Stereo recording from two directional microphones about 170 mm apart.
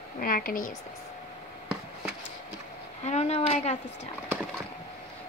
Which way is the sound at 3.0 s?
40° left (ahead or behind).